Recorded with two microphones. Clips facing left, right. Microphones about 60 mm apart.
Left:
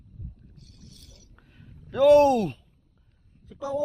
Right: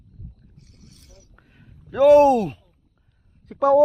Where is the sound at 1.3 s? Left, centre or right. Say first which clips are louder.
Right 1 dB; centre.